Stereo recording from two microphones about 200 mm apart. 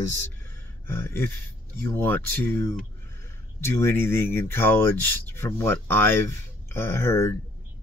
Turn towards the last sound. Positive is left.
turn(degrees=10)  # may be behind; listen again after turning